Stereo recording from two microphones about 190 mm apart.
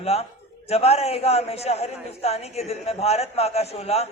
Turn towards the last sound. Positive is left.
turn(degrees=35)  # may be behind; listen again after turning